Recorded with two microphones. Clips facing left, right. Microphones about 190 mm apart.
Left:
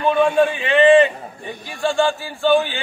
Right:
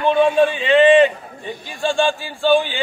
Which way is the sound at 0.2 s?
20° right (ahead or behind).